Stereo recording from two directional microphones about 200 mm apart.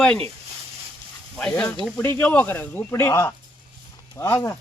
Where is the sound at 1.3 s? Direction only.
5° left (ahead or behind).